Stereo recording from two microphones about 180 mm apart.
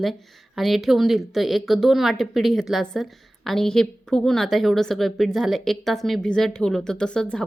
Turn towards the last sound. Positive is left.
turn(degrees=5)  # may be behind; listen again after turning